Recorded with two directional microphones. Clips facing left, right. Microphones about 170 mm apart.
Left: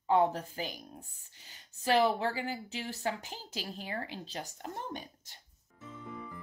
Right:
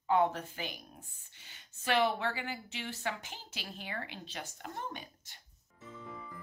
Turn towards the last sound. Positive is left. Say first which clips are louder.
# left 2 dB
turn(degrees=35)  # may be behind; listen again after turning